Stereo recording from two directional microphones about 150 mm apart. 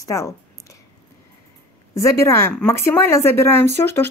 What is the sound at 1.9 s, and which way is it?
A woman's voice, 20° left (ahead or behind).